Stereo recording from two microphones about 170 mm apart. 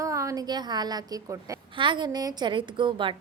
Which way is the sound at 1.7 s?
30° right (ahead or behind).